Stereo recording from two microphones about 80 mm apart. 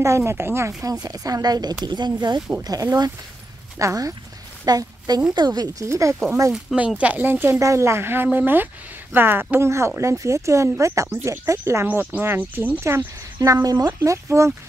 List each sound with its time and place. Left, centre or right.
0.0 s speech: right
0.8 s speech: right
2.6 s speech: right
4.6 s a woman's voice: right
5.9 s speech: right
6.5 s speech: centre
7.0 s speech: centre; by 13.6 s right
13.6 s speech: right